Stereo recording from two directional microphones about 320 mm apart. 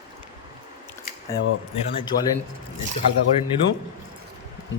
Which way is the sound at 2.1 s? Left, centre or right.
Left.